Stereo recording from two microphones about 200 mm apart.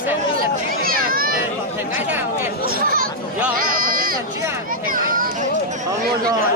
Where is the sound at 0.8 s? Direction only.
45° right (ahead or behind).